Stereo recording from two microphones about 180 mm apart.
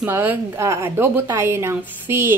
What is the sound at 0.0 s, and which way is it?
A woman's voice, 10° right (ahead or behind).